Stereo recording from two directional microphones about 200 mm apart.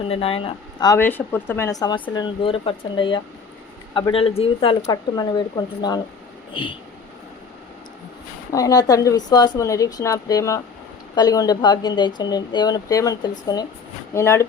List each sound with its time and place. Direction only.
0.1 s speech: 30° left (ahead or behind)
8.5 s speech: 20° left (ahead or behind)